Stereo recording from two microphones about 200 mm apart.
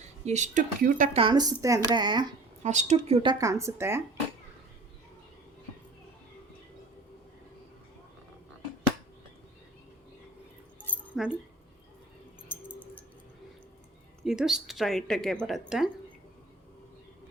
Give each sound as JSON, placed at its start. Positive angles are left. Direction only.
{"t": 0.0, "sound": "speech", "side_deg": -35}
{"t": 1.2, "sound": "speech", "side_deg": -20}
{"t": 2.6, "sound": "a woman's voice", "side_deg": -35}
{"t": 3.3, "sound": "speech", "side_deg": -15}
{"t": 11.1, "sound": "keys jangling", "side_deg": -5}
{"t": 12.5, "sound": "a sound", "side_deg": -5}
{"t": 14.3, "sound": "speech", "side_deg": 0}